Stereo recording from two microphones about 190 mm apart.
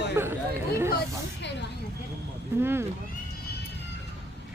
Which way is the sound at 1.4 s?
65° left (ahead or behind).